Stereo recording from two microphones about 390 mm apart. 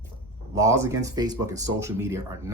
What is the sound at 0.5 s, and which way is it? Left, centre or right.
Speech, centre.